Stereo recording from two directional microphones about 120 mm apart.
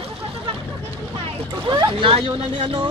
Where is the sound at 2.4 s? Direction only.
45° right (ahead or behind).